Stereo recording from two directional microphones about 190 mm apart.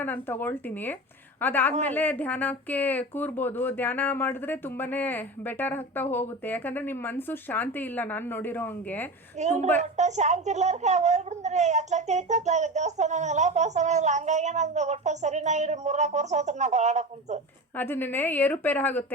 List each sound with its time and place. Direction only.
0.0 s speech: 10° left (ahead or behind)
9.4 s speech: 40° right (ahead or behind)
17.7 s speech: 10° left (ahead or behind)